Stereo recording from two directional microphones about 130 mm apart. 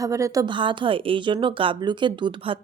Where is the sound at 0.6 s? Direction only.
40° right (ahead or behind).